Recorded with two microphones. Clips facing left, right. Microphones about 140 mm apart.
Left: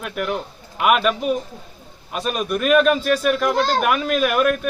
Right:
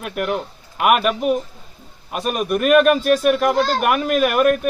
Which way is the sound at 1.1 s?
50° right (ahead or behind).